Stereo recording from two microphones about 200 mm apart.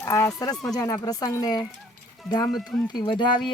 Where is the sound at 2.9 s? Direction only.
20° left (ahead or behind).